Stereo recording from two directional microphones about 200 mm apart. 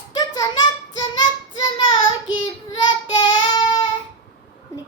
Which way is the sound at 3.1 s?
20° left (ahead or behind).